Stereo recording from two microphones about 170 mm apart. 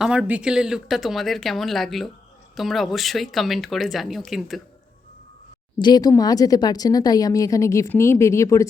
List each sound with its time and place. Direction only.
0.0 s speech: 5° right (ahead or behind)
5.8 s a woman's voice: 25° left (ahead or behind)